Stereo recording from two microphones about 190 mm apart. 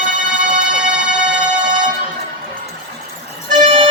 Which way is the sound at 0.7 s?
5° right (ahead or behind).